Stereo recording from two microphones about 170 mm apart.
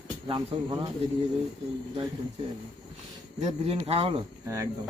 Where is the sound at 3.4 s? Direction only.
35° right (ahead or behind).